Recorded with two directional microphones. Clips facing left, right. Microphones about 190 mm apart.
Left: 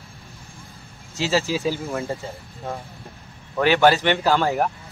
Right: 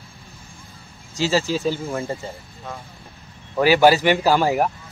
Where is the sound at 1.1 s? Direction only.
Centre (ahead or behind).